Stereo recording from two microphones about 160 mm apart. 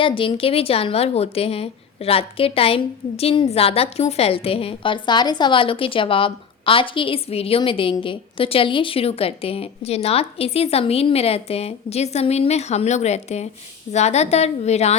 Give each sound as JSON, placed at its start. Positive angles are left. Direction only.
{"t": 0.0, "sound": "a woman's voice", "side_deg": 35}